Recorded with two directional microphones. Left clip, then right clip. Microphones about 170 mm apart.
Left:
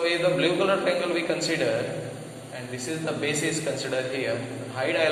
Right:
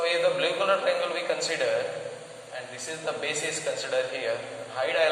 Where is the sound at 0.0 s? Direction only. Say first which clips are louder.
Left 1 dB; 10° right (ahead or behind).